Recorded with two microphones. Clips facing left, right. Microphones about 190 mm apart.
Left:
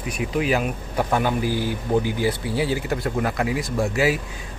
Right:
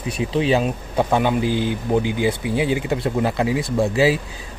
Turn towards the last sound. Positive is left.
turn(degrees=-30)  # may be behind; listen again after turning